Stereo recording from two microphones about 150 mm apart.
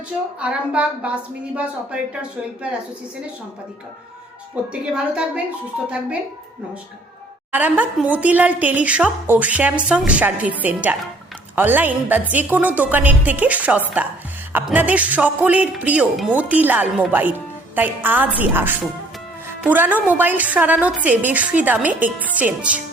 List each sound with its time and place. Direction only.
0.3 s speech: 5° right (ahead or behind)
4.7 s speech: 5° right (ahead or behind)
7.5 s speech: 10° right (ahead or behind)